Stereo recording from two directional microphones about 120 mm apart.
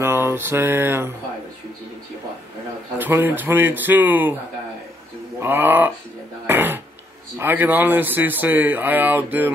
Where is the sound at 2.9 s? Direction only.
15° right (ahead or behind).